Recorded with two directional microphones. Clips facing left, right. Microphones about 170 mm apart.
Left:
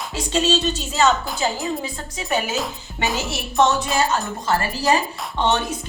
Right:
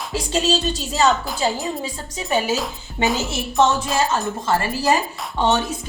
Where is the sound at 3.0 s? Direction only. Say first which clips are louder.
Right 3 dB; centre (ahead or behind).